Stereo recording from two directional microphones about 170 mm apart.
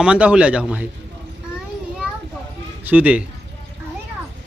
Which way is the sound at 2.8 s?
10° right (ahead or behind).